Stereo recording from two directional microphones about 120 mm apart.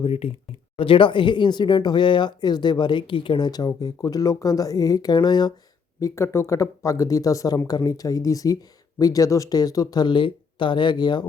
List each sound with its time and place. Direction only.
0.0 s speech: 55° left (ahead or behind)
0.8 s speech: 45° left (ahead or behind)
6.0 s speech: 25° left (ahead or behind)